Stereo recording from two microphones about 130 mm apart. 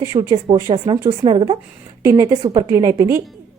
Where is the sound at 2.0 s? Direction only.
25° right (ahead or behind).